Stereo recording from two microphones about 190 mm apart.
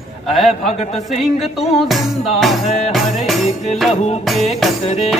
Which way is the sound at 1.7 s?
Centre (ahead or behind).